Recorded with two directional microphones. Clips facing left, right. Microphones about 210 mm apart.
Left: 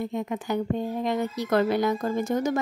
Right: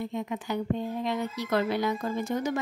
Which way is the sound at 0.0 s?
50° left (ahead or behind).